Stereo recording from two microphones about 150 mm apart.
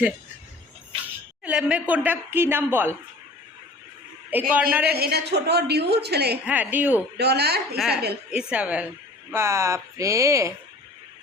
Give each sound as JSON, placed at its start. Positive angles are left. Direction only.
{"t": 1.5, "sound": "a woman's voice", "side_deg": -10}
{"t": 4.3, "sound": "a woman's voice", "side_deg": -10}
{"t": 4.9, "sound": "a woman's voice", "side_deg": -90}
{"t": 6.4, "sound": "a woman's voice", "side_deg": -10}
{"t": 7.2, "sound": "a woman's voice", "side_deg": -90}
{"t": 8.3, "sound": "a woman's voice", "side_deg": -5}